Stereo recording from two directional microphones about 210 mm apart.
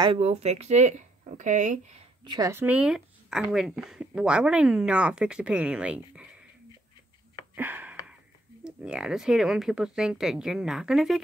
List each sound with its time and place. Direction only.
0.0 s speech: 30° right (ahead or behind)
2.3 s speech: 15° right (ahead or behind)
7.5 s a sound: 10° right (ahead or behind)
8.6 s speech: 5° right (ahead or behind)